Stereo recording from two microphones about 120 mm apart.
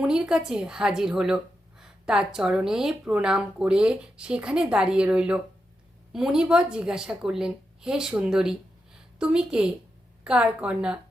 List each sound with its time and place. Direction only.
0.0 s a woman's voice: 5° right (ahead or behind)